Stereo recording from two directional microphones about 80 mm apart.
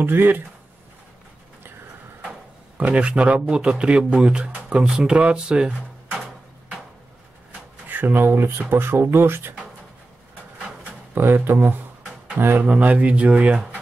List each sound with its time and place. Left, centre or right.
0.0 s speech: right
2.8 s speech: centre
7.9 s speech: right
11.1 s speech: right
12.6 s speech: centre